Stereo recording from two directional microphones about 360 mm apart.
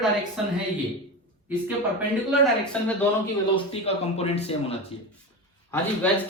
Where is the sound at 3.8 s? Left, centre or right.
Centre.